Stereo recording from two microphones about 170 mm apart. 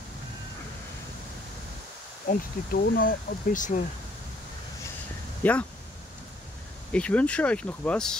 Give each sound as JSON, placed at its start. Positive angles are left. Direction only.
{"t": 2.2, "sound": "speech", "side_deg": 60}
{"t": 5.4, "sound": "speech", "side_deg": 10}
{"t": 6.9, "sound": "speech", "side_deg": 5}